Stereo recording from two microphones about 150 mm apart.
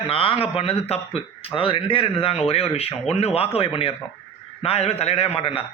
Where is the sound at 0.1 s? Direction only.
40° left (ahead or behind).